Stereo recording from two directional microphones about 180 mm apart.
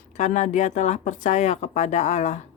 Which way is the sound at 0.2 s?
40° left (ahead or behind).